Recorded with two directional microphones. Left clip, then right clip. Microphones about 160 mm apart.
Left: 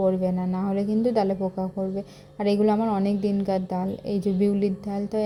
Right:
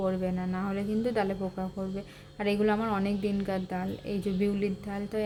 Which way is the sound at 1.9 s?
20° left (ahead or behind).